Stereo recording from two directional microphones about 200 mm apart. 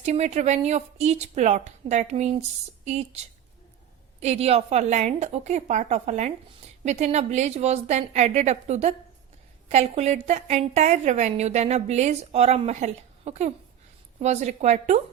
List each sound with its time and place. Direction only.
0.0 s a woman's voice: 35° right (ahead or behind)
4.2 s a woman's voice: 30° right (ahead or behind)